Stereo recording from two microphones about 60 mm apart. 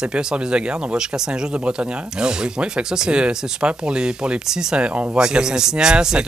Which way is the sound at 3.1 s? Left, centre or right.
Centre.